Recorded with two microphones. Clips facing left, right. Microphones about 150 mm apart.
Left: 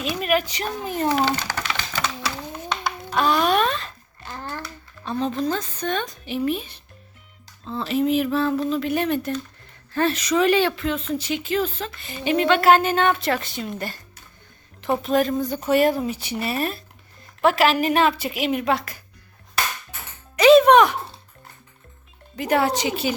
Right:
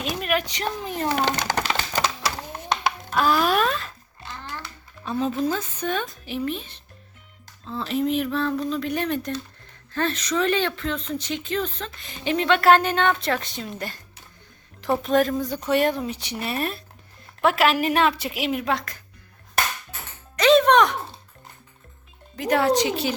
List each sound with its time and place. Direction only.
0.2 s speech: centre (ahead or behind)
1.6 s typewriter: 40° right (ahead or behind)
3.2 s a sound: centre (ahead or behind)
4.3 s a sound: 45° left (ahead or behind)
5.0 s speech: 5° right (ahead or behind)
6.4 s speech: 10° left (ahead or behind)
20.3 s music: 10° left (ahead or behind)
22.4 s speech: centre (ahead or behind)